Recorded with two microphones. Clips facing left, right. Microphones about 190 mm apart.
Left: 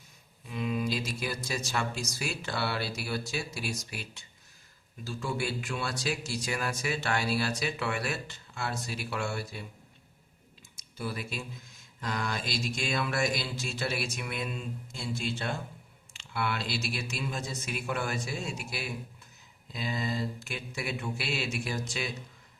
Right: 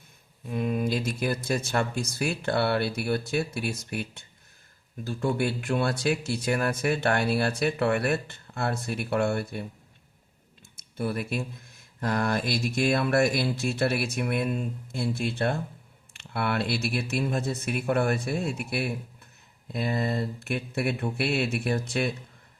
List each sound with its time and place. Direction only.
0.4 s speech: 50° right (ahead or behind)
10.8 s speech: 55° right (ahead or behind)